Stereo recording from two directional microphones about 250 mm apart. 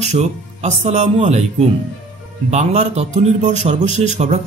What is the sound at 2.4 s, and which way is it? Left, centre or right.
Speech, right.